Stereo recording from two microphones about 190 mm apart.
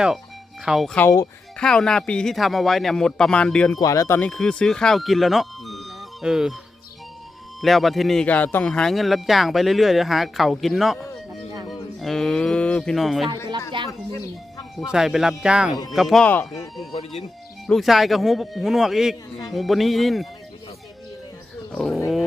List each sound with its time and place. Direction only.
0.6 s speech: 5° right (ahead or behind)
0.9 s speech: 15° left (ahead or behind)
1.5 s speech: 5° left (ahead or behind)
3.8 s speech: 15° left (ahead or behind)
4.3 s speech: 5° left (ahead or behind)
7.6 s speech: centre (ahead or behind)
13.7 s speech: 25° right (ahead or behind)
14.8 s speech: centre (ahead or behind)
17.7 s speech: centre (ahead or behind)
21.7 s speech: centre (ahead or behind)